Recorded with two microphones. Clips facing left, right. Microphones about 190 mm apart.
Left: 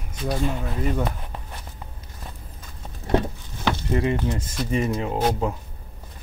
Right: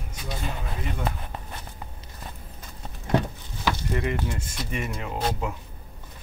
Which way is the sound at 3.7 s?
25° left (ahead or behind).